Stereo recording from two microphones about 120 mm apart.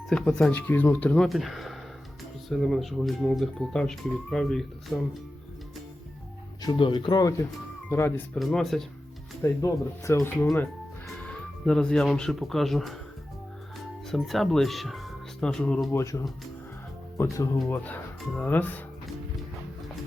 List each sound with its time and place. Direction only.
0.1 s speech: 5° left (ahead or behind)
4.9 s speech: 20° left (ahead or behind)
6.6 s speech: 40° left (ahead or behind)
7.9 s speech: 20° left (ahead or behind)
8.4 s speech: centre (ahead or behind)
9.4 s speech: 25° left (ahead or behind)
11.2 s speech: 10° left (ahead or behind)
14.1 s speech: centre (ahead or behind)
15.9 s speech: 20° left (ahead or behind)
17.3 s speech: 25° left (ahead or behind)
17.7 s speech: 15° left (ahead or behind)